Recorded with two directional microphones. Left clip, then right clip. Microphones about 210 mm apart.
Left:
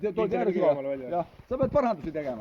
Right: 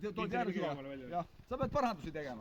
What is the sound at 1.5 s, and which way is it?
Speech, 40° right (ahead or behind).